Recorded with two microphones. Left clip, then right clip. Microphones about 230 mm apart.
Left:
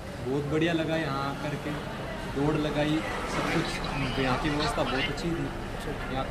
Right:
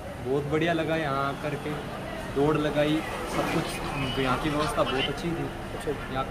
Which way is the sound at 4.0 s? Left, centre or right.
Right.